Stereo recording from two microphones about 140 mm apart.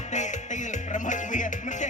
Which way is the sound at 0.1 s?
60° left (ahead or behind).